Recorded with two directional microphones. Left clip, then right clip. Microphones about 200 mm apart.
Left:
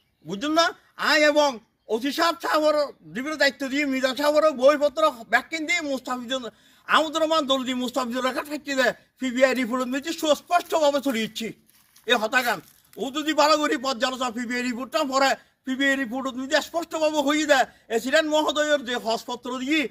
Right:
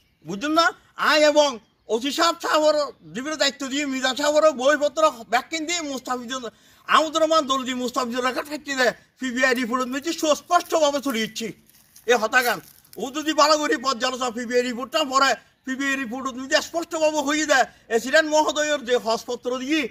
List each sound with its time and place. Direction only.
0.3 s a man's voice: 15° left (ahead or behind)